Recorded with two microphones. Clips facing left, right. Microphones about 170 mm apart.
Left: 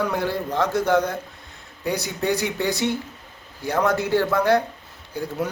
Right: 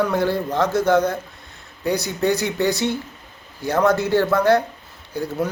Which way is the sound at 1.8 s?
40° right (ahead or behind).